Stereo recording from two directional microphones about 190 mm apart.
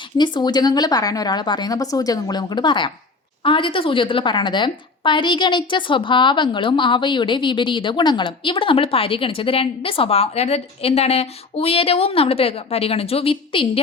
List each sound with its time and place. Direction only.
0.2 s a woman's voice: 20° left (ahead or behind)